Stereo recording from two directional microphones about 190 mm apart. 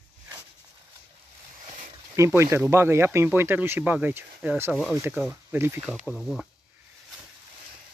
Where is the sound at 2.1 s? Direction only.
15° right (ahead or behind).